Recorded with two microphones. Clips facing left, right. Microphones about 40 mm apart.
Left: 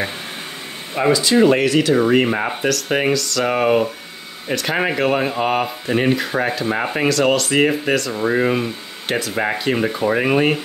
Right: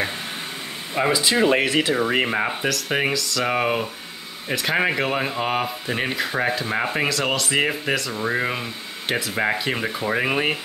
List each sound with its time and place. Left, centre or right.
1.0 s speech: centre
1.6 s speech: centre
2.1 s speech: centre